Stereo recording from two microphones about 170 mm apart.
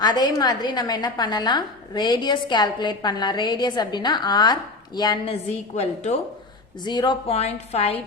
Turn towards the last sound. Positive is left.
turn(degrees=35)  # may be behind; listen again after turning